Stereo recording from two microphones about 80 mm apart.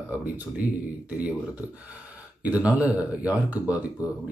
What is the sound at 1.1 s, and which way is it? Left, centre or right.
Speech, centre.